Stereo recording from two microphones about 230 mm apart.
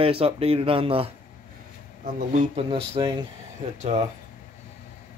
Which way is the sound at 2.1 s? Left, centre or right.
Right.